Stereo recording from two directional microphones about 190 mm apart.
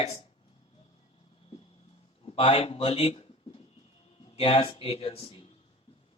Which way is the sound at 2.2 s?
30° left (ahead or behind).